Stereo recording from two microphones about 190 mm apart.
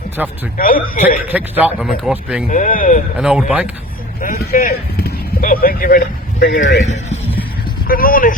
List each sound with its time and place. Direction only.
0.2 s speech: 5° right (ahead or behind)
0.5 s a man's voice: 50° left (ahead or behind)
1.3 s speech: 10° right (ahead or behind)
2.5 s a man's voice: 45° left (ahead or behind)
3.2 s speech: 5° right (ahead or behind)
4.2 s speech: 45° left (ahead or behind)
6.8 s a man's voice: 35° left (ahead or behind)
7.9 s a man's voice: 50° left (ahead or behind)